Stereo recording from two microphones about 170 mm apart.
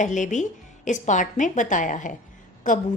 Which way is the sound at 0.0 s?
45° left (ahead or behind).